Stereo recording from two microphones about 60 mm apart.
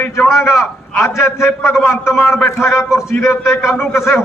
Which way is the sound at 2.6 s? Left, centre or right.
Left.